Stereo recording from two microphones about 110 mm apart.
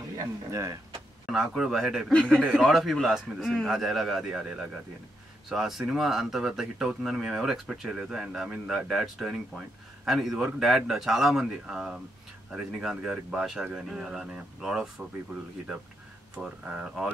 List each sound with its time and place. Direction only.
0.2 s speech: 30° right (ahead or behind)
1.2 s speech: 5° right (ahead or behind)
2.1 s speech: 10° left (ahead or behind)
16.6 s speech: 5° right (ahead or behind)